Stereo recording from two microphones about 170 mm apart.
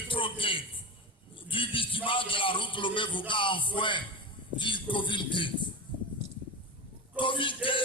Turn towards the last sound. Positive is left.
turn(degrees=30)  # may be behind; listen again after turning